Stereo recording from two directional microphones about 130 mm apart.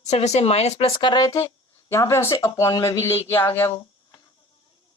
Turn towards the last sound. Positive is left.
turn(degrees=15)  # may be behind; listen again after turning